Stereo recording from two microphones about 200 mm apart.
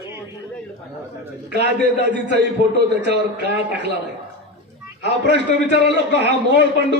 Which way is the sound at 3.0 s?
55° right (ahead or behind).